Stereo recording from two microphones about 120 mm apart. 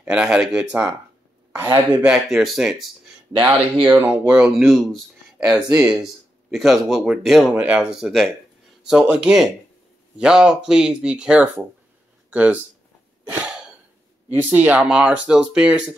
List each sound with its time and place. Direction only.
0.0 s speech: 10° right (ahead or behind)
1.9 s speech: 15° right (ahead or behind)
2.2 s speech: centre (ahead or behind)
3.8 s speech: 15° right (ahead or behind)
4.6 s speech: centre (ahead or behind)
5.5 s speech: 10° right (ahead or behind)
13.3 s a sound: 5° right (ahead or behind)
14.3 s speech: 15° right (ahead or behind)